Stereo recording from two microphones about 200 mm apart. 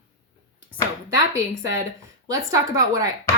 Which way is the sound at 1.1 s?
15° right (ahead or behind).